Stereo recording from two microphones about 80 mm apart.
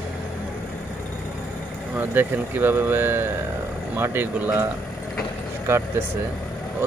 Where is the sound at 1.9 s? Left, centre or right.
Right.